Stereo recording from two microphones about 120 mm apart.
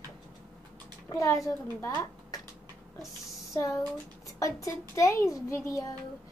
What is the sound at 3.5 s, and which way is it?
A child's voice, 30° left (ahead or behind).